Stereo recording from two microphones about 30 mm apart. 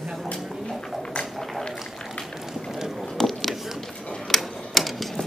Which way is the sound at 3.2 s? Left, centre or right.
Centre.